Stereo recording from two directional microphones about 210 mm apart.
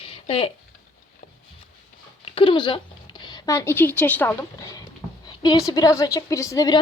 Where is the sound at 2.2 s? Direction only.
25° left (ahead or behind).